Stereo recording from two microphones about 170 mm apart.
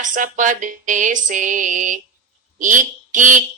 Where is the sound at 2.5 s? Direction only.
50° right (ahead or behind).